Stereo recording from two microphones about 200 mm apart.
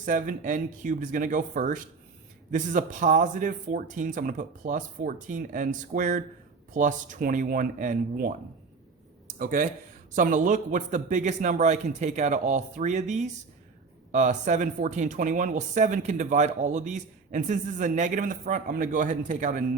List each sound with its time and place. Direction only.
0.0 s speech: 40° right (ahead or behind)
9.2 s a sound: 40° right (ahead or behind)
10.2 s speech: 40° right (ahead or behind)